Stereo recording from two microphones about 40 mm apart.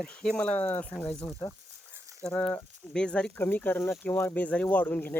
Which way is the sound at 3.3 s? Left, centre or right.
Left.